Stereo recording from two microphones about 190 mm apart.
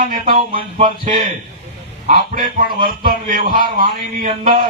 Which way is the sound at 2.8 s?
50° right (ahead or behind).